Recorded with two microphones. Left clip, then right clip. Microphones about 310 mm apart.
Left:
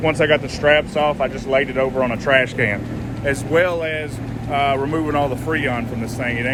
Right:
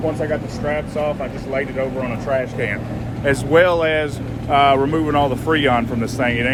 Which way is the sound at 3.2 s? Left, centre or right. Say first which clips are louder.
Right 3 dB; centre.